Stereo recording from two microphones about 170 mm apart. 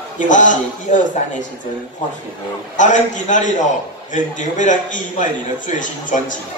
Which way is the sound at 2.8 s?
45° left (ahead or behind).